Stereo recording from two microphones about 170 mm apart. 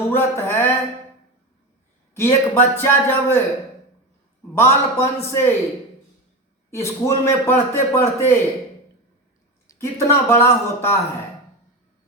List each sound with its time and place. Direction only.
0.1 s a man's voice: 15° left (ahead or behind)
2.1 s a man's voice: 10° left (ahead or behind)
4.5 s a man's voice: 15° left (ahead or behind)
6.7 s a man's voice: 15° left (ahead or behind)
9.6 s a man's voice: 15° left (ahead or behind)